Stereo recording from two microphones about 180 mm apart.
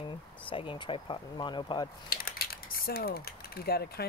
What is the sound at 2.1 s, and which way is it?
Speech, 55° left (ahead or behind).